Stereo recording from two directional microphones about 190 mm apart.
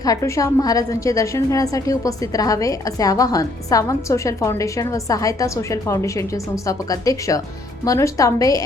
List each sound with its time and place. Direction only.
0.0 s a woman's voice: 15° left (ahead or behind)